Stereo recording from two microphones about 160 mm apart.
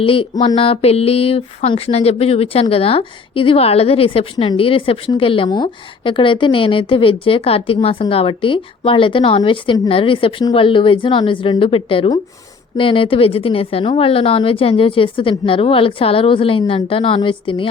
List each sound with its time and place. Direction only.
0.0 s speech: 35° left (ahead or behind)